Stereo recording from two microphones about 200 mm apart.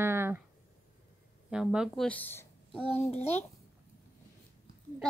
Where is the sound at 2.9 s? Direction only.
30° left (ahead or behind).